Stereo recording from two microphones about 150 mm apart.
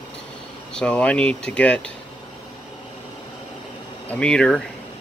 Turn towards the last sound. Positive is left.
turn(degrees=5)  # may be behind; listen again after turning